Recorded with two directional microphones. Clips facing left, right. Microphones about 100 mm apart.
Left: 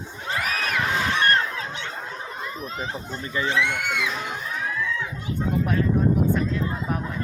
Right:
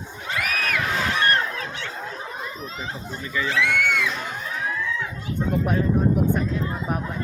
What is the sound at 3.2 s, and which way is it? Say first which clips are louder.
Speech: even; 30° left (ahead or behind).